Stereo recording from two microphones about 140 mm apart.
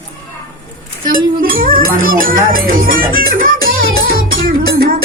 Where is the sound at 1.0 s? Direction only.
85° right.